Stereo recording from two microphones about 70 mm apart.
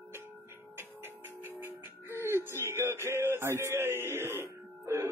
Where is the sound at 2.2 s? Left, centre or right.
Right.